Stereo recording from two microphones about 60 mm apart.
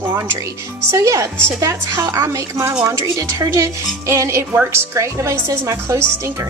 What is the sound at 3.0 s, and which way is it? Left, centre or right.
Speech, right.